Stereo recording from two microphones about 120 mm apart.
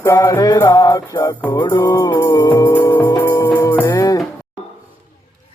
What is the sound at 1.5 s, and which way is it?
Music, 35° left (ahead or behind).